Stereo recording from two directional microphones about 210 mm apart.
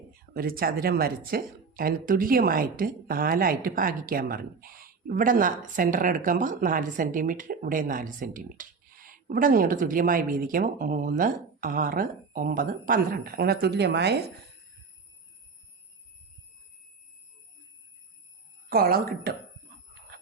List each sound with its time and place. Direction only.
0.3 s speech: 45° right (ahead or behind)
18.7 s speech: 45° right (ahead or behind)